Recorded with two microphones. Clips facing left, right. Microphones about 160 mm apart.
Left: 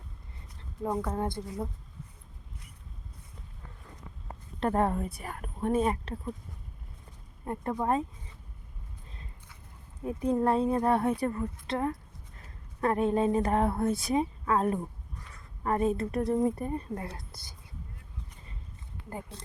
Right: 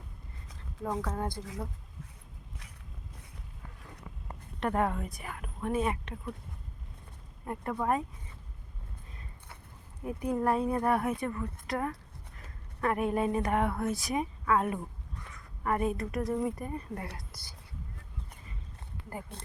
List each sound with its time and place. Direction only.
1.0 s a woman's voice: 25° left (ahead or behind)
4.6 s speech: 30° left (ahead or behind)
7.4 s a woman's voice: 30° left (ahead or behind)
10.0 s a woman's voice: 25° left (ahead or behind)